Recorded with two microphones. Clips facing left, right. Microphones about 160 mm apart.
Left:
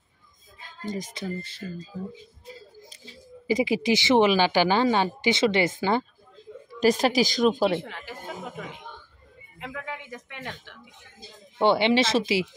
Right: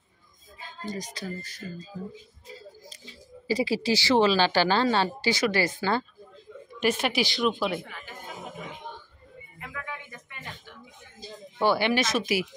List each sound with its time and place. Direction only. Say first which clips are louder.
0.9 s speech: left 5 dB; 25° left (ahead or behind)
3.4 s a woman's voice: left 2 dB; 15° left (ahead or behind)
6.8 s speech: left 5 dB; 35° left (ahead or behind)
9.6 s a sound: left 3 dB; 75° left (ahead or behind)
11.5 s speech: left 3 dB; 25° left (ahead or behind)